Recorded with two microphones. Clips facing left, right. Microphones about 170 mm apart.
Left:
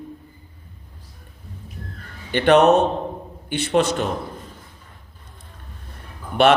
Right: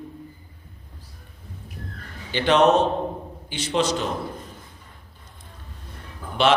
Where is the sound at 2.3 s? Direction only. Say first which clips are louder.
Left 4 dB; 60° left (ahead or behind).